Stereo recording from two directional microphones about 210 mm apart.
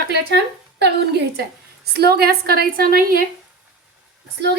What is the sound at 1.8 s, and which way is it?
A woman's voice, 50° right (ahead or behind).